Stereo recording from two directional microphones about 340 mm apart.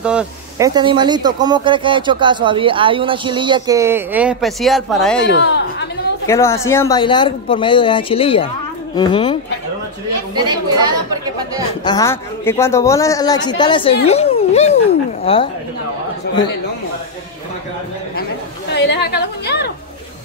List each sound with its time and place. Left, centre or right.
0.0 s speech: centre
5.3 s a sound: left
6.2 s speech: centre
10.3 s speech: centre
11.8 s speech: centre
18.7 s a sound: left